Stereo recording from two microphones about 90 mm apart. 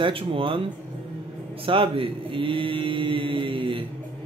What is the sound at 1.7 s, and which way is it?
Mantra, 75° right (ahead or behind).